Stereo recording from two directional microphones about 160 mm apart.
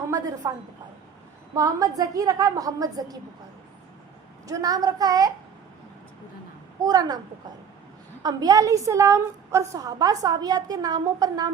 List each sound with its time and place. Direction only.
0.1 s a woman's voice: 25° right (ahead or behind)
1.5 s a woman's voice: 20° right (ahead or behind)
4.4 s a woman's voice: 20° right (ahead or behind)
6.8 s a woman's voice: 25° right (ahead or behind)
8.2 s a woman's voice: 25° right (ahead or behind)